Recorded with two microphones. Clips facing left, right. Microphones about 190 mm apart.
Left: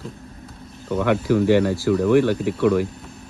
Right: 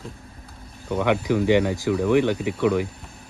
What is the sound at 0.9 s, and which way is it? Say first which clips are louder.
Speech: left 2 dB; 10° right (ahead or behind).